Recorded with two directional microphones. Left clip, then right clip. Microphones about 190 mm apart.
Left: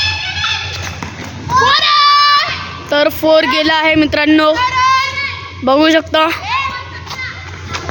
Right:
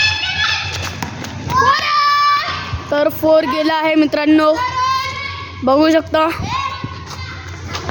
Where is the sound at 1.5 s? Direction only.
35° left (ahead or behind).